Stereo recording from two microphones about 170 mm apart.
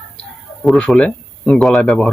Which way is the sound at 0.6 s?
5° left (ahead or behind).